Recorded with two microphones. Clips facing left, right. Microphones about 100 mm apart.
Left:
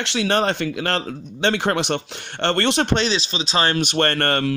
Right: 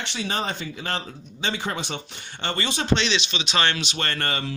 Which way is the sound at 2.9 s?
40° left (ahead or behind).